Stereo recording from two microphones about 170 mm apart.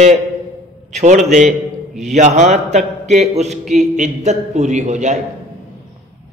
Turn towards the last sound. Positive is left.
turn(degrees=-45)  # may be behind; listen again after turning